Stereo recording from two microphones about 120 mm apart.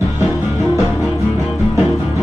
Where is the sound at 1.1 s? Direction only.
25° left (ahead or behind).